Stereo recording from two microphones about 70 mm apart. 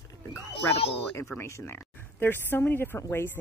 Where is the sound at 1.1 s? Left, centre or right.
Left.